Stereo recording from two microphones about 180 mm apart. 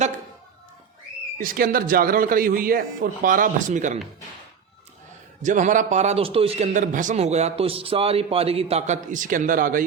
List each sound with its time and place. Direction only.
1.4 s a man's voice: 55° right (ahead or behind)
5.4 s a man's voice: 45° right (ahead or behind)